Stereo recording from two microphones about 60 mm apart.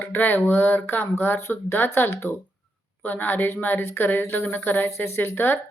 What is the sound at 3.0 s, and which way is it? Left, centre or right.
Speech, left.